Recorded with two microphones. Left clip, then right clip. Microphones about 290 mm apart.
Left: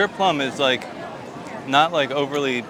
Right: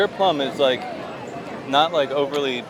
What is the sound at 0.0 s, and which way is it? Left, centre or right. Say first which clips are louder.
A man's voice: even; left.